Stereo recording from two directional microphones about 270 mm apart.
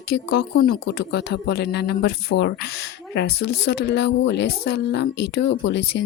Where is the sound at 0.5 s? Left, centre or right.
Left.